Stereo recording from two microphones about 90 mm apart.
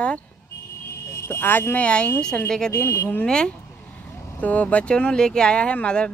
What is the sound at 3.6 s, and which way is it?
Vehicle, 20° left (ahead or behind).